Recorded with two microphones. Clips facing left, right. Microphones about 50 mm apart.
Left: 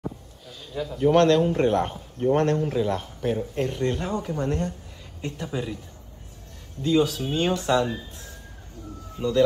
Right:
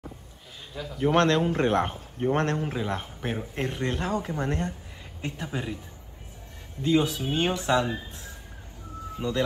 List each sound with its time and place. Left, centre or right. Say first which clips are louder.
0.9 s a man's voice: left 4 dB; right
6.8 s a man's voice: left 2 dB; centre
9.2 s a man's voice: left 4 dB; centre